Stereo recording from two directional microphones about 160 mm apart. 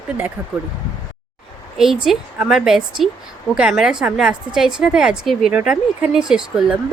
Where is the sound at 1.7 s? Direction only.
Centre (ahead or behind).